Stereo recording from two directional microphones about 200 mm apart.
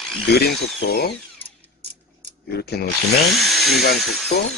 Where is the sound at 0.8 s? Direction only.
55° left (ahead or behind).